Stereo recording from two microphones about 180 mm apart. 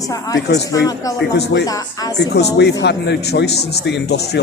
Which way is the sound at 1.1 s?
65° left (ahead or behind).